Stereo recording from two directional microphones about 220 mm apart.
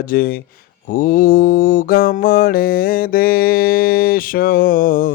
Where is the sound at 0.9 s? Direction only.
40° left (ahead or behind).